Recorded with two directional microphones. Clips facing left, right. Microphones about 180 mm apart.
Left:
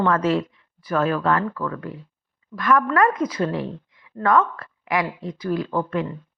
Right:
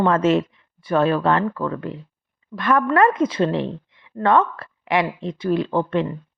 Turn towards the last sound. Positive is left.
turn(degrees=-25)  # may be behind; listen again after turning